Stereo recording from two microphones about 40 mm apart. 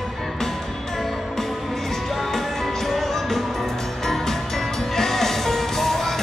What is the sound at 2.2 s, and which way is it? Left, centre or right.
Music, centre.